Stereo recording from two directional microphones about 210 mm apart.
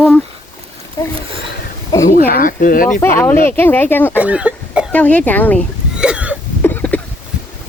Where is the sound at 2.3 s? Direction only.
40° left (ahead or behind).